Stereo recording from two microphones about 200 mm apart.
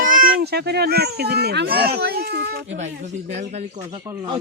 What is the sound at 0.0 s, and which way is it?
A child's voice, 45° right (ahead or behind).